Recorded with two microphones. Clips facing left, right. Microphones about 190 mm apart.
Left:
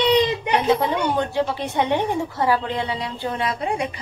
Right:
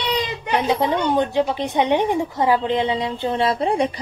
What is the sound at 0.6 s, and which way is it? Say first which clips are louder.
A woman's voice: right 2 dB; 20° right (ahead or behind).